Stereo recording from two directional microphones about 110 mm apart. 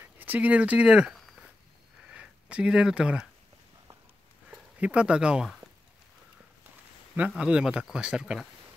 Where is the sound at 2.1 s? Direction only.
10° right (ahead or behind).